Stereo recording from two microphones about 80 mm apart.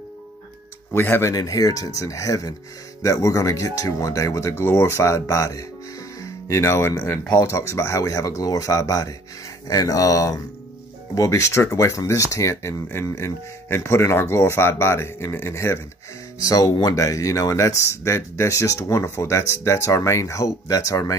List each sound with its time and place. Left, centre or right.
0.9 s speech: left
1.3 s speech: left
16.3 s speech: left